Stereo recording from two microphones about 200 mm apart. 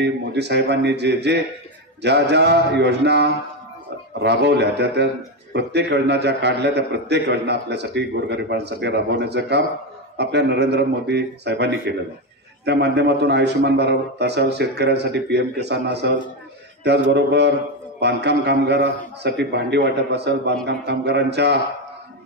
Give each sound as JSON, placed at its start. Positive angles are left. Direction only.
{"t": 0.0, "sound": "a man's voice", "side_deg": -60}